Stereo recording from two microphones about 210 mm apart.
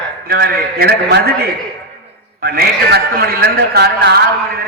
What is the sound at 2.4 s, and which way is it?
A man's voice, 45° right (ahead or behind).